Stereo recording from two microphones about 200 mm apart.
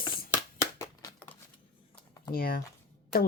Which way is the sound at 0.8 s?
15° left (ahead or behind).